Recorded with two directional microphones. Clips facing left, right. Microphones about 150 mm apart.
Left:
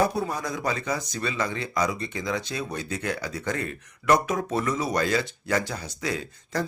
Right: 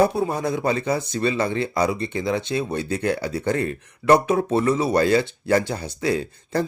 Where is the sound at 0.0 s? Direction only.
25° right (ahead or behind).